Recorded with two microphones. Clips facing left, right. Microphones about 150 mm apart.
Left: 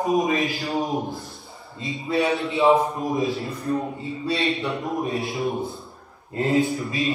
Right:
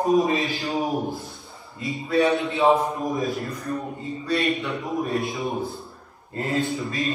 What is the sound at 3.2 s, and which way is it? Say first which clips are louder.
Speech: left 2 dB; 45° right (ahead or behind).